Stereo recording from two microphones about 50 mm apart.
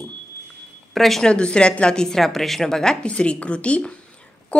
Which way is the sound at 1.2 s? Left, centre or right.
Centre.